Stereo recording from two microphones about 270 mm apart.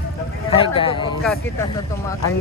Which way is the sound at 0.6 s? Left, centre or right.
Centre.